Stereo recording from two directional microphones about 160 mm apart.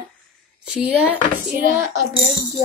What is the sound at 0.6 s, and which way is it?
Speech, 5° right (ahead or behind).